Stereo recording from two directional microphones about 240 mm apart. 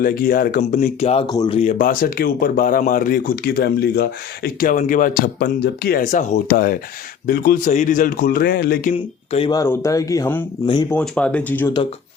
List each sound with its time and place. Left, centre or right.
0.0 s speech: left; by 11.7 s centre